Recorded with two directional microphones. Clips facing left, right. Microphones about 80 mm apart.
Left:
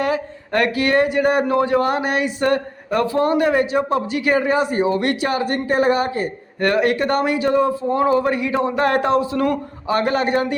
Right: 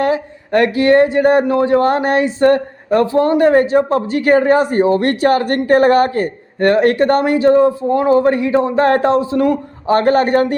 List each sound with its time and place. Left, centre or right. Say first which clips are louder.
0.0 s speech: right 5 dB; right
6.6 s a man's voice: right 6 dB; right
9.8 s speech: right 7 dB; right